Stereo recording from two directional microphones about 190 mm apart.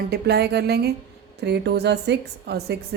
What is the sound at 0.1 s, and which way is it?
A woman's voice, 60° right (ahead or behind).